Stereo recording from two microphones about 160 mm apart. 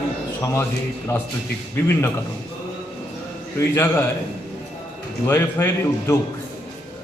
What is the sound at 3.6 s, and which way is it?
Speech, 15° left (ahead or behind).